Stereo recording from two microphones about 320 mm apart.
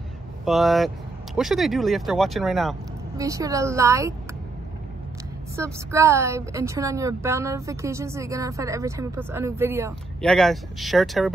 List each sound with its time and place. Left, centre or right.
0.5 s speech: centre
3.2 s a woman's voice: centre
5.6 s a woman's voice: centre